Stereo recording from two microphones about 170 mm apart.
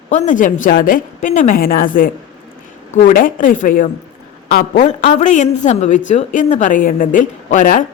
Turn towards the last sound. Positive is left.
turn(degrees=50)  # may be behind; listen again after turning